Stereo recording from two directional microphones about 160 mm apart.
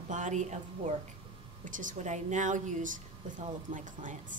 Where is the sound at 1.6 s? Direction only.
55° right (ahead or behind).